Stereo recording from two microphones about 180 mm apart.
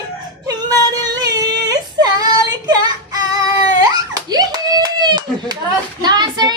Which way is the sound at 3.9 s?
20° right (ahead or behind).